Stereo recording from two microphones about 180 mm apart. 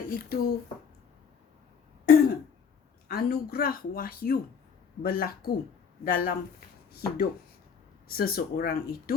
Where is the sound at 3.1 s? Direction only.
60° left (ahead or behind).